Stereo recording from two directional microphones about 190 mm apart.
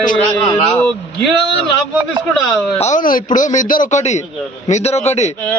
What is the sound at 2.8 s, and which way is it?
Speech, 40° left (ahead or behind).